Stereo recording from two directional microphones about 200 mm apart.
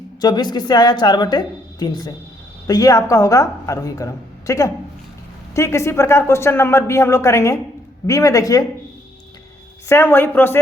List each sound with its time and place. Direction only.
0.2 s a woman's voice: 20° left (ahead or behind)
9.9 s a woman's voice: 10° left (ahead or behind)